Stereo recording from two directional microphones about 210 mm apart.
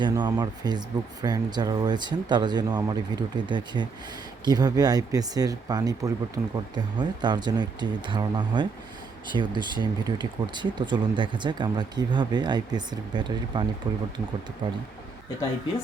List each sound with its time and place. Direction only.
0.0 s speech: 20° right (ahead or behind)